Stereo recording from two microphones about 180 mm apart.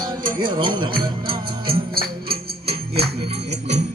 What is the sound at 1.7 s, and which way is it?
Music, 60° right (ahead or behind).